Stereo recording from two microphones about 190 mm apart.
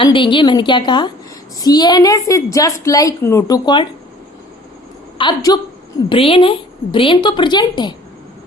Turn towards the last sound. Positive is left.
turn(degrees=25)  # may be behind; listen again after turning